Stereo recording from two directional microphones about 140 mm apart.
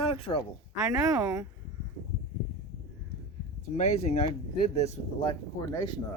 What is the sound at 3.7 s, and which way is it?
Speech, 55° left (ahead or behind).